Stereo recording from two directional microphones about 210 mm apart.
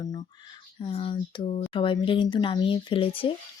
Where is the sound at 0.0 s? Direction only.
20° left (ahead or behind).